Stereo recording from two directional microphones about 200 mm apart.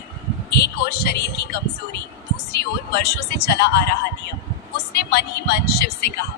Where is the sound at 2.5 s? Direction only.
55° left (ahead or behind).